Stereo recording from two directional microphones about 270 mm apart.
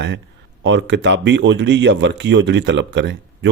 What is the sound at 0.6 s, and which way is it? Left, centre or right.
A man's voice, right.